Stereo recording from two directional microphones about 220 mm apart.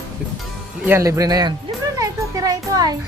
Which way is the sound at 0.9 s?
10° right (ahead or behind).